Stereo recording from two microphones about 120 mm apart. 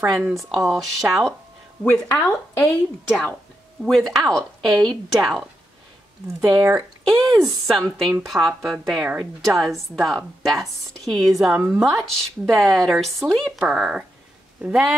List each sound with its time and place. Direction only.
0.3 s speech: centre (ahead or behind)
1.8 s a woman's voice: 15° left (ahead or behind)
6.4 s speech: 5° right (ahead or behind)
7.2 s speech: 30° right (ahead or behind)
7.6 s speech: centre (ahead or behind)